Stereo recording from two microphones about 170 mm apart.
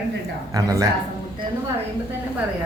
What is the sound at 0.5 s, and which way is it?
Speech, 20° right (ahead or behind).